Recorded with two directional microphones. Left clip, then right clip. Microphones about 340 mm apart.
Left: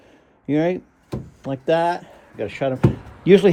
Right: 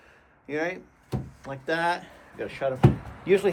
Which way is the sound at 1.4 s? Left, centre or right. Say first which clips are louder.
Left 8 dB; centre.